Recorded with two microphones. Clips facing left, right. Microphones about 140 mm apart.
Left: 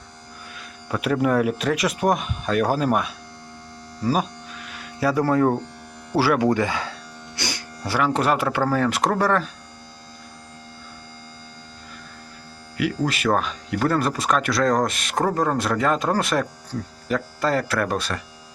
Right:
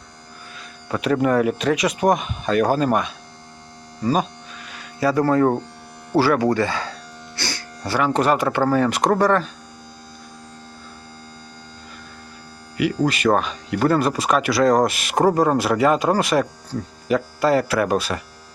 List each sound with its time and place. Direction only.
0.9 s speech: centre (ahead or behind)
4.0 s music: 5° left (ahead or behind)
6.1 s speech: 10° left (ahead or behind)
7.3 s music: 15° left (ahead or behind)
8.0 s speech: centre (ahead or behind)
12.7 s speech: centre (ahead or behind)